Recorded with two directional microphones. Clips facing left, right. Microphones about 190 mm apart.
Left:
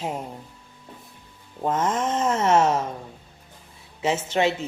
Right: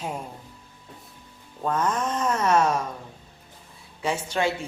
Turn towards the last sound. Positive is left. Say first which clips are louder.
# left 3 dB
turn(degrees=20)  # may be behind; listen again after turning